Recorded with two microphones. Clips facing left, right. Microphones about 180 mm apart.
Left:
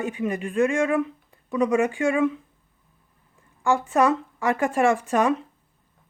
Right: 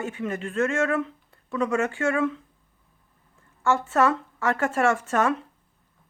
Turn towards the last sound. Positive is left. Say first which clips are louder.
# left 2 dB
turn(degrees=15)  # may be behind; listen again after turning